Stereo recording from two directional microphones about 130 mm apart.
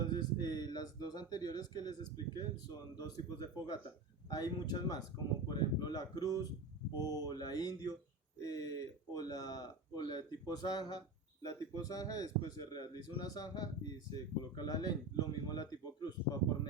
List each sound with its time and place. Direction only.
0.0 s speech: 35° left (ahead or behind)
4.3 s a man's voice: 30° left (ahead or behind)